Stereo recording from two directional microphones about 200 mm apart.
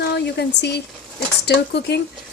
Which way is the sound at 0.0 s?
55° left (ahead or behind).